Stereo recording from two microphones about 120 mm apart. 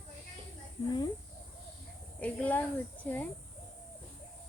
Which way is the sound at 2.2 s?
10° left (ahead or behind).